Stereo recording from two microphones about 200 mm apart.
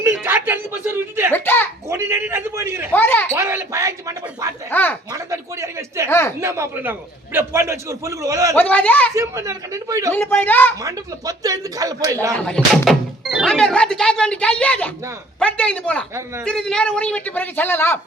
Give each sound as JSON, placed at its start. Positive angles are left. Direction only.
{"t": 0.0, "sound": "a sound", "side_deg": -10}
{"t": 1.3, "sound": "a sound", "side_deg": 10}
{"t": 1.9, "sound": "speech", "side_deg": -10}
{"t": 2.9, "sound": "a man's voice", "side_deg": 10}
{"t": 3.3, "sound": "speech", "side_deg": -15}
{"t": 4.7, "sound": "a man's voice", "side_deg": 10}
{"t": 5.1, "sound": "a sound", "side_deg": -15}
{"t": 6.1, "sound": "a man's voice", "side_deg": 10}
{"t": 6.4, "sound": "speech", "side_deg": -15}
{"t": 8.5, "sound": "a man's voice", "side_deg": 5}
{"t": 9.1, "sound": "speech", "side_deg": -15}
{"t": 10.2, "sound": "a man's voice", "side_deg": 10}
{"t": 10.8, "sound": "speech", "side_deg": -15}
{"t": 12.5, "sound": "a man's voice", "side_deg": 5}